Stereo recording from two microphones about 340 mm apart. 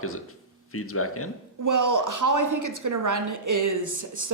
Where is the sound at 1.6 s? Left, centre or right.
Right.